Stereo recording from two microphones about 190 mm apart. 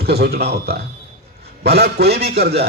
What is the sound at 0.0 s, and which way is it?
A man's voice, 55° right (ahead or behind).